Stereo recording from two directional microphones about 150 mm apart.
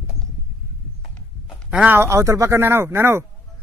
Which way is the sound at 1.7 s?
10° right (ahead or behind).